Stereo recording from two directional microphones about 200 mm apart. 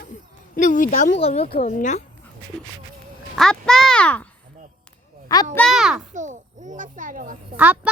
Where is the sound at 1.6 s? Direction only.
40° left (ahead or behind).